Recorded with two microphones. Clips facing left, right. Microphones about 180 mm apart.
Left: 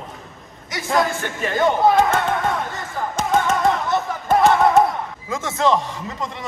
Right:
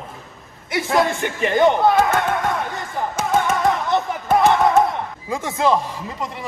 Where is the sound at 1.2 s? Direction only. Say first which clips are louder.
Right 4 dB; 20° right (ahead or behind).